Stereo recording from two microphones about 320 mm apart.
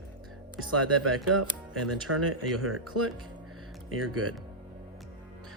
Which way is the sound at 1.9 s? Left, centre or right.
Right.